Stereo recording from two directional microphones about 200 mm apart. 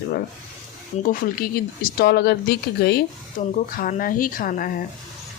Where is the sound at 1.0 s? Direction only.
45° left (ahead or behind).